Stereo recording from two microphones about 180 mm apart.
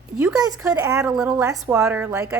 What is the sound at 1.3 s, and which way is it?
Speech, 15° right (ahead or behind).